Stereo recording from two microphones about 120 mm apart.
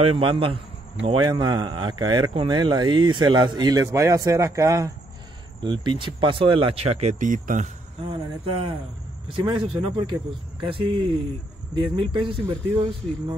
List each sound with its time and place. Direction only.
0.2 s speech: 45° right (ahead or behind)
1.0 s speech: 35° right (ahead or behind)
5.6 s speech: 40° right (ahead or behind); by 7.7 s 90° right
8.1 s speech: 45° right (ahead or behind)